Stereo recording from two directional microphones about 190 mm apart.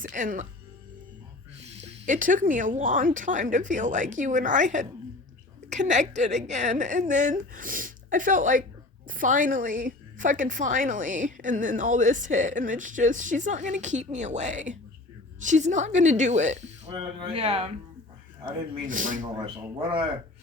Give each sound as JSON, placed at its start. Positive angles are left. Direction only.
{"t": 0.0, "sound": "a woman's voice", "side_deg": -45}
{"t": 1.5, "sound": "a woman's voice", "side_deg": -35}
{"t": 18.4, "sound": "a woman's voice", "side_deg": -45}
{"t": 19.5, "sound": "speech", "side_deg": -25}